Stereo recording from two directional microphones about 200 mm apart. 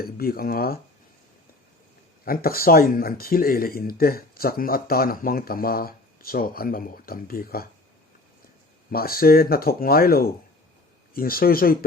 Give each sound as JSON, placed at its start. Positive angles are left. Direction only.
{"t": 0.0, "sound": "speech", "side_deg": 50}
{"t": 2.2, "sound": "speech", "side_deg": 45}
{"t": 8.9, "sound": "speech", "side_deg": 50}